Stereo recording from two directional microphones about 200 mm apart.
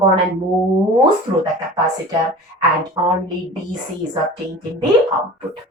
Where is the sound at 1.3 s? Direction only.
20° right (ahead or behind).